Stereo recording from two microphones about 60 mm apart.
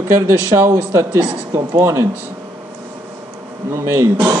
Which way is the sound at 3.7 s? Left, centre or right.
Right.